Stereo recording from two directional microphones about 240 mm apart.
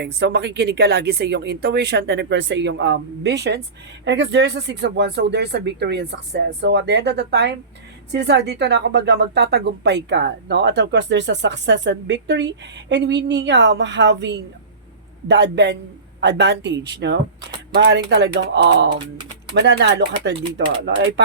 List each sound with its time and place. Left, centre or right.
0.0 s a woman's voice: right